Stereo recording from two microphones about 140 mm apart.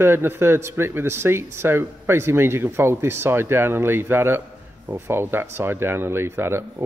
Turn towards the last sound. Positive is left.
turn(degrees=-15)  # may be behind; listen again after turning